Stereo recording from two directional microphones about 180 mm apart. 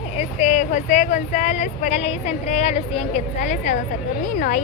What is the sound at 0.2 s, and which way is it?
Speech, 40° left (ahead or behind).